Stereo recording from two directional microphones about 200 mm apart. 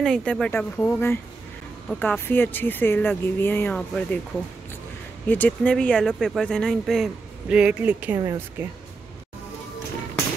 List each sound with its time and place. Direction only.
0.0 s speech: 5° left (ahead or behind)
5.3 s speech: 10° left (ahead or behind); by 8.6 s 15° right (ahead or behind)